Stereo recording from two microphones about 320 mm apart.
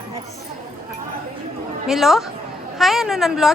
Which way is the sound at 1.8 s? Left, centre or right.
Centre.